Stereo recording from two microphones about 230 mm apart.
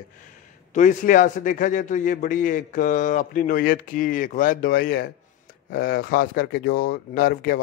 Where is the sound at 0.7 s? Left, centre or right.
Left.